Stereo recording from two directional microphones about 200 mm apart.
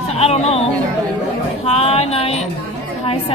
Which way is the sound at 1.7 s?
30° left (ahead or behind).